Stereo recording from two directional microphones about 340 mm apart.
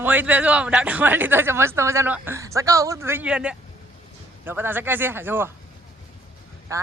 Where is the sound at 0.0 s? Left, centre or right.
Centre.